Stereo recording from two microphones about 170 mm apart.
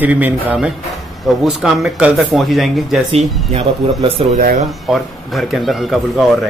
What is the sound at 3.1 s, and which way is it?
Speech, 35° right (ahead or behind).